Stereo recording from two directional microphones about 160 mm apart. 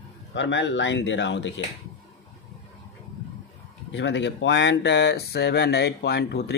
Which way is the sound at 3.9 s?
90° left.